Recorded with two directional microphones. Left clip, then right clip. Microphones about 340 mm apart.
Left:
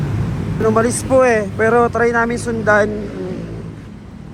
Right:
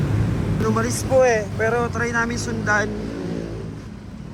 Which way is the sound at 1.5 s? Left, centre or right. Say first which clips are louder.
Left 7 dB; left.